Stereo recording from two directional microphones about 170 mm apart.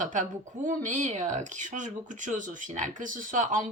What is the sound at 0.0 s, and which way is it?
Speech, 50° right (ahead or behind).